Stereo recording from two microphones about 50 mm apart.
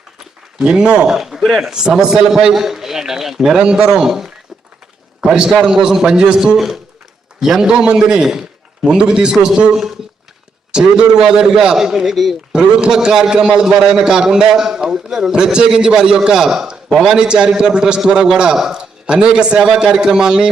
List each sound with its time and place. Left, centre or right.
0.6 s a man's voice: centre
12.5 s a man's voice: centre
17.2 s a man's voice: centre